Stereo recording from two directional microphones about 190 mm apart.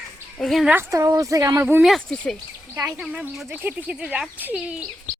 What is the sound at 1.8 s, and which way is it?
Speech, centre (ahead or behind).